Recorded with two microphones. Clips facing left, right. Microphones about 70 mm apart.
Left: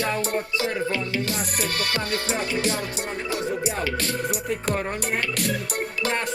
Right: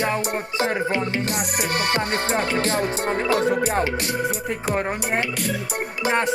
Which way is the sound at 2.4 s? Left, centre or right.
Right.